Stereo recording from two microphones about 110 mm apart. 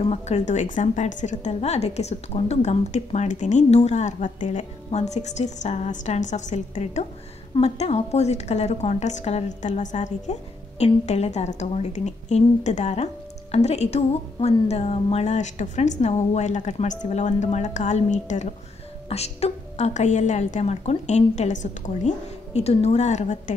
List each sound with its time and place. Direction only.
0.0 s a woman's voice: 80° left
7.6 s a woman's voice: 75° left (ahead or behind); by 18.5 s 90° left
19.0 s a woman's voice: 70° left (ahead or behind); by 21.5 s 90° left
22.0 s a woman's voice: 75° left (ahead or behind); by 23.5 s 90° left